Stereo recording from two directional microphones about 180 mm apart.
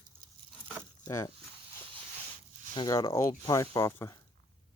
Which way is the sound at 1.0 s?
20° left (ahead or behind).